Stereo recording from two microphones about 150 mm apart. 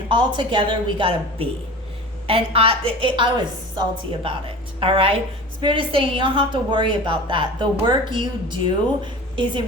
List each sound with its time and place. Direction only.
0.1 s a woman's voice: 35° right (ahead or behind)